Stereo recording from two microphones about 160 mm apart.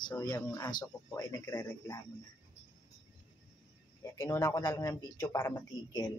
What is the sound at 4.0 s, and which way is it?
Speech, 20° left (ahead or behind).